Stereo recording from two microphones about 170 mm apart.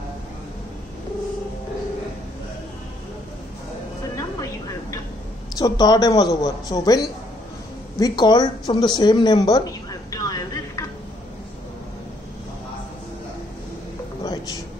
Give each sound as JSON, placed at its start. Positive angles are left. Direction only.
{"t": 5.6, "sound": "speech", "side_deg": 25}
{"t": 8.0, "sound": "a woman's voice", "side_deg": 25}
{"t": 14.2, "sound": "music", "side_deg": 25}